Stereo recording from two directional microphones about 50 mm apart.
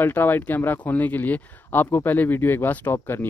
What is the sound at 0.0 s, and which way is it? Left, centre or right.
Speech, left.